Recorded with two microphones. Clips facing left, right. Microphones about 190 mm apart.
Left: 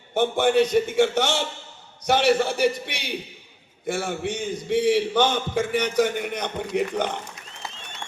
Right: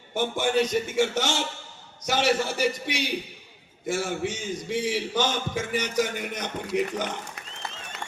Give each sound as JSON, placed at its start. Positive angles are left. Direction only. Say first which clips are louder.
{"t": 0.1, "sound": "a man's voice", "louder": "left 5 dB", "side_deg": 60}